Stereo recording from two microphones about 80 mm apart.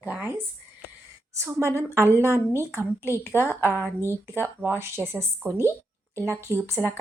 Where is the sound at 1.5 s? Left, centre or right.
Right.